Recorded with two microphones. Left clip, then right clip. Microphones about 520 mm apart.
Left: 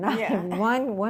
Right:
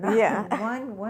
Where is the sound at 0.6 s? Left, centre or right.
Left.